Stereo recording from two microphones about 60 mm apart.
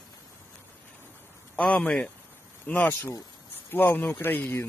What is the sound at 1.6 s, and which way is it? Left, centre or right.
Speech, left.